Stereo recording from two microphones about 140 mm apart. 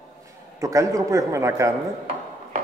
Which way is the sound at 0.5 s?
25° right (ahead or behind).